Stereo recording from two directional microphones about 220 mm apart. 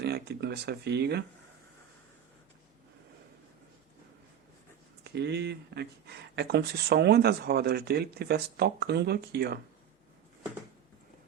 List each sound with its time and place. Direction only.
0.0 s speech: 50° right (ahead or behind)
5.0 s speech: 50° right (ahead or behind)